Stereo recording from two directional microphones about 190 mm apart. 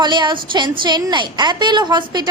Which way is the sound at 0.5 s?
25° right (ahead or behind).